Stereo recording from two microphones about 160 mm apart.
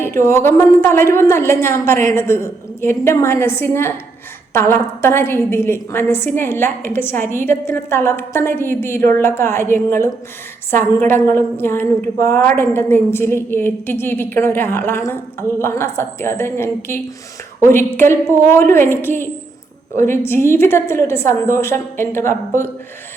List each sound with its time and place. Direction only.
0.2 s a woman's voice: 15° left (ahead or behind)